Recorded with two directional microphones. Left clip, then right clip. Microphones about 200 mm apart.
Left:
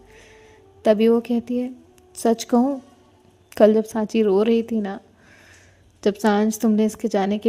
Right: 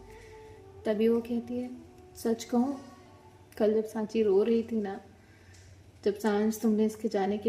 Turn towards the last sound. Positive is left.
turn(degrees=50)  # may be behind; listen again after turning